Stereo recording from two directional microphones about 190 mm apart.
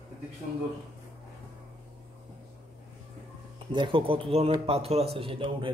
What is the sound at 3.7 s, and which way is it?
A man's voice, 25° right (ahead or behind).